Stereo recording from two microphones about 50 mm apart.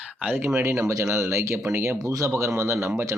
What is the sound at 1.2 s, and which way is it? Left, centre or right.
Speech, right.